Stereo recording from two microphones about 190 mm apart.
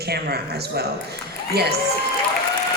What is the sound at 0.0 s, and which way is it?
Speech, 55° right (ahead or behind).